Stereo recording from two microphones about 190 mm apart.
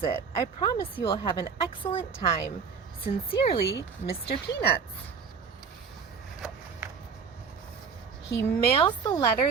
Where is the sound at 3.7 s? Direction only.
60° left (ahead or behind).